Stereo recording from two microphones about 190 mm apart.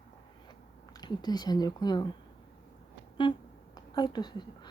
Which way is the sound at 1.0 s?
20° left (ahead or behind).